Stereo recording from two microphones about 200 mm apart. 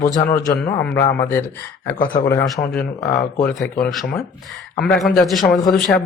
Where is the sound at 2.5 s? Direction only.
5° left (ahead or behind).